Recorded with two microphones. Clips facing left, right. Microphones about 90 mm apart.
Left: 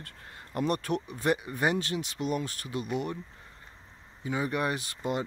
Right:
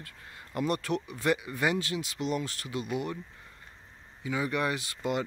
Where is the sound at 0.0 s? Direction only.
40° left (ahead or behind).